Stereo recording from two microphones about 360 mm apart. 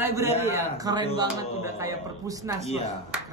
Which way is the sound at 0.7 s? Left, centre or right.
Centre.